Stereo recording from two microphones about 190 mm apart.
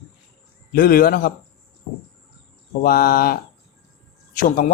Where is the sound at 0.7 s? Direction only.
50° left (ahead or behind).